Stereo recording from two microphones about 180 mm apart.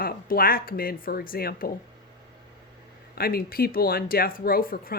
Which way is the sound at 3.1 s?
55° left (ahead or behind).